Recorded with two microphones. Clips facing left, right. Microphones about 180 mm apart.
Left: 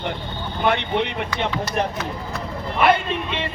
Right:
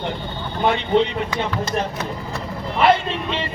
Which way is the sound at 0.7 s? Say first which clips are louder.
Right 3 dB; 60° left (ahead or behind).